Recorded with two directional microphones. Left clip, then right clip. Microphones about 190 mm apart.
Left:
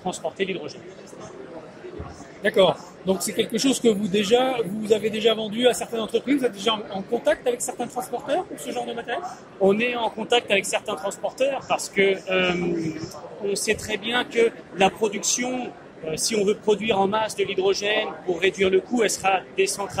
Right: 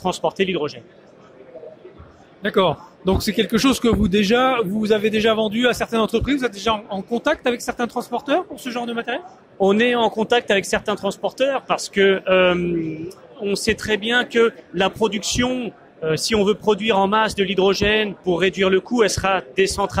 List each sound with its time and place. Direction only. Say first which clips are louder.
0.0 s speech: right 7 dB; 50° right (ahead or behind)
2.4 s speech: even; 35° right (ahead or behind)